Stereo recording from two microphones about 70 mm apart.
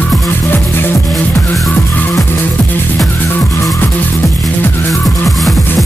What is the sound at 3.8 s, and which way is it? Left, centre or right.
Music, left.